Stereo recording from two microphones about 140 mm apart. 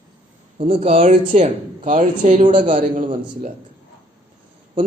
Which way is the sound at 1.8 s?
65° right (ahead or behind).